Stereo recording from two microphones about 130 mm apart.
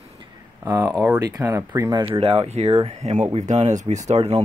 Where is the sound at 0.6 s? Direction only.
25° right (ahead or behind).